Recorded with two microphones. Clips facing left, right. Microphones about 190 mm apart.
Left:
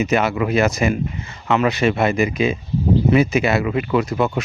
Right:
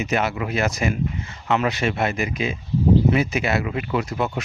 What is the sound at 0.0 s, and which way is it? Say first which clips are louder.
Speech: left 5 dB; 90° left.